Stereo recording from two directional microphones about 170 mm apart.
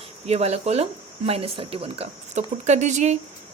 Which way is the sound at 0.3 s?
40° right (ahead or behind).